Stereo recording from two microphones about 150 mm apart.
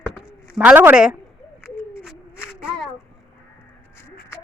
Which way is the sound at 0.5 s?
10° right (ahead or behind).